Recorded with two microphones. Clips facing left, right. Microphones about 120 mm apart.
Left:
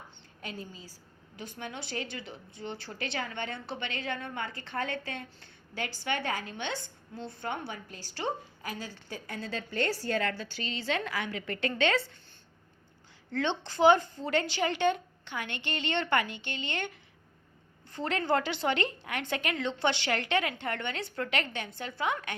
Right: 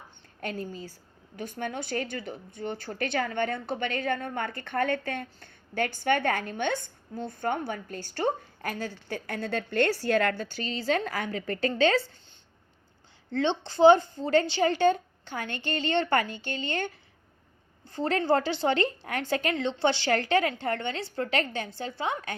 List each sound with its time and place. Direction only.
0.4 s a woman's voice: 55° right (ahead or behind); by 12.1 s 35° right (ahead or behind)
13.3 s a woman's voice: 30° right (ahead or behind)